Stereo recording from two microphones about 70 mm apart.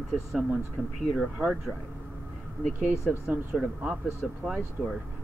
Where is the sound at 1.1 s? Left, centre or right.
Centre.